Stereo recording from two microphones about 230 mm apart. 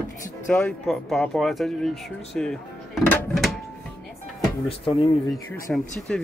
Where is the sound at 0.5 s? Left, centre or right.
Centre.